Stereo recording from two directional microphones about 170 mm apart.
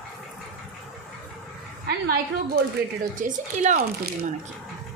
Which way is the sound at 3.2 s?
45° right (ahead or behind).